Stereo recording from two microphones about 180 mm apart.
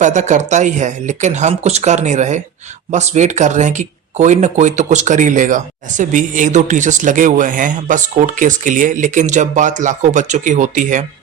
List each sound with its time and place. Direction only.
0.0 s speech: 40° right (ahead or behind)